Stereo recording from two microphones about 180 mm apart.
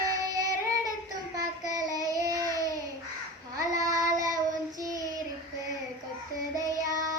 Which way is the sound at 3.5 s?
20° right (ahead or behind).